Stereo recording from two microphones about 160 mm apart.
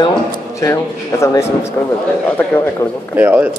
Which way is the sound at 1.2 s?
20° left (ahead or behind).